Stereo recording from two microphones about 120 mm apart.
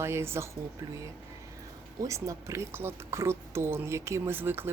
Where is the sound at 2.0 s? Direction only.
25° right (ahead or behind).